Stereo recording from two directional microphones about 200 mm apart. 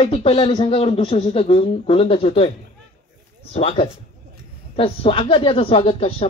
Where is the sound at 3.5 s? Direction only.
30° left (ahead or behind).